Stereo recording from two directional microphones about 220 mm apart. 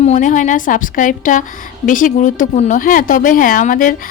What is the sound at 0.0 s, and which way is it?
A woman's voice, 35° left (ahead or behind).